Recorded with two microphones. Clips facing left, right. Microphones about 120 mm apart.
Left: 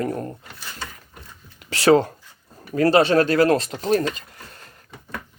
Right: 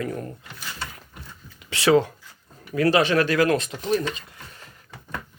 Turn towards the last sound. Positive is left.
turn(degrees=40)  # may be behind; listen again after turning